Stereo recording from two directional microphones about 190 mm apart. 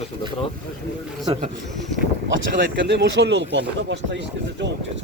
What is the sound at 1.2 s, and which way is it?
Speech, 30° right (ahead or behind).